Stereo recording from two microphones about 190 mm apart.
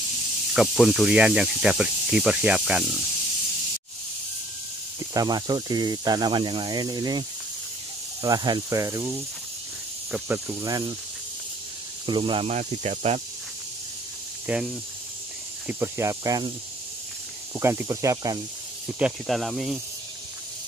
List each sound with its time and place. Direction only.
0.6 s speech: centre (ahead or behind)
5.1 s speech: 20° right (ahead or behind)
10.6 s speech: 20° right (ahead or behind)
12.1 s speech: 25° right (ahead or behind)
14.4 s speech: 5° right (ahead or behind)
17.6 s speech: 15° right (ahead or behind)
18.9 s speech: 5° right (ahead or behind)